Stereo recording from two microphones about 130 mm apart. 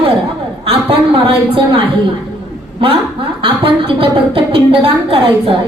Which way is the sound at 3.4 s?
45° right (ahead or behind).